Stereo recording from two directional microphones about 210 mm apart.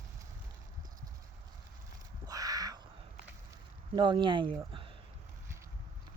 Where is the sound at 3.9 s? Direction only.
20° right (ahead or behind).